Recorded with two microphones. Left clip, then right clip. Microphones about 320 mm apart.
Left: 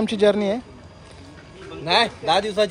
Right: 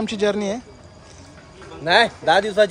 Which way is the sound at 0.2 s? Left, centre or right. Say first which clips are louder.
Left 3 dB; centre.